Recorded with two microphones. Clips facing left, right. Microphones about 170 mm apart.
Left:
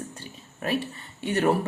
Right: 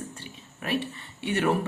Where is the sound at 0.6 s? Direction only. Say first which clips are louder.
Left 1 dB; 40° left (ahead or behind).